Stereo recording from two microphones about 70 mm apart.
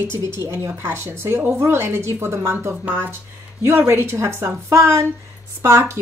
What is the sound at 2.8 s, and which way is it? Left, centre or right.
Speech, right.